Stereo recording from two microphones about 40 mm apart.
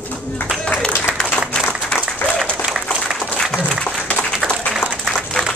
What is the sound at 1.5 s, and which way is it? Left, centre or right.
Applause, left.